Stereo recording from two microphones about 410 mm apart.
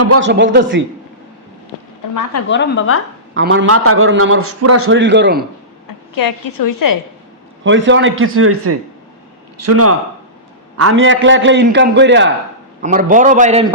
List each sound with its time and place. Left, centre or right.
0.0 s a man's voice: right
2.5 s a woman's voice: left
3.3 s a man's voice: right
6.1 s a woman's voice: left
7.6 s a man's voice: right